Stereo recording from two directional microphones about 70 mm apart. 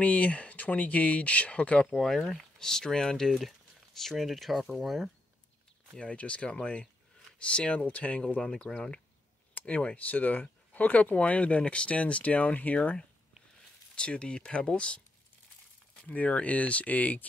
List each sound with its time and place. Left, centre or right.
0.0 s speech: centre
1.9 s speech: centre
5.9 s speech: centre
16.1 s speech: centre